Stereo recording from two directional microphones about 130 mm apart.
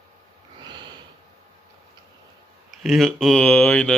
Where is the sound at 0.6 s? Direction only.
35° right (ahead or behind).